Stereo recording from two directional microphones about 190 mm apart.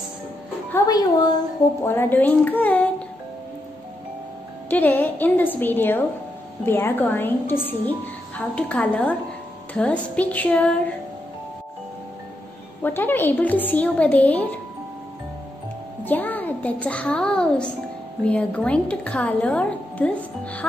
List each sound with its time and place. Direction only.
0.8 s a woman's voice: 20° left (ahead or behind)
4.6 s a woman's voice: 10° left (ahead or behind)
12.8 s a woman's voice: 10° left (ahead or behind)
16.0 s a child's voice: 10° left (ahead or behind)